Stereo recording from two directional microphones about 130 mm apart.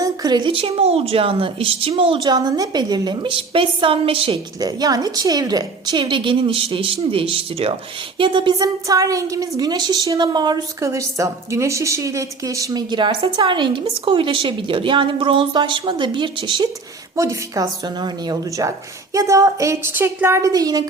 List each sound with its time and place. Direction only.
0.0 s a woman's voice: 30° right (ahead or behind)
4.6 s a woman's voice: 30° right (ahead or behind)
17.2 s a woman's voice: 25° right (ahead or behind)